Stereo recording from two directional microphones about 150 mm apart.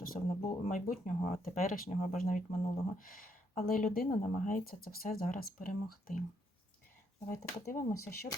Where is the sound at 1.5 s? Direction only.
70° left (ahead or behind).